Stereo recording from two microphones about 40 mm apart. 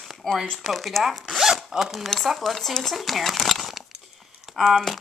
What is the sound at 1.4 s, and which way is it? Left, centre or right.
Zipper, centre.